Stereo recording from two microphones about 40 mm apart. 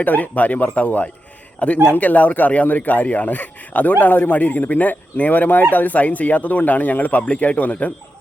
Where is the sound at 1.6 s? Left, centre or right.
Left.